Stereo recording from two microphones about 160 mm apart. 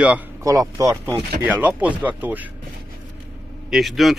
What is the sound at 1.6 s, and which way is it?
Speech, 10° right (ahead or behind).